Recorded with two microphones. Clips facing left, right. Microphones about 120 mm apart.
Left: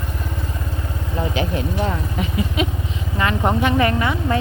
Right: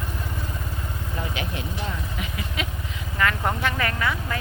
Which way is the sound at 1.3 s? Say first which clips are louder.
Left 8 dB; 30° left (ahead or behind).